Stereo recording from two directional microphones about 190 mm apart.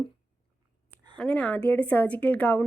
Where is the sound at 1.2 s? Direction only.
5° left (ahead or behind).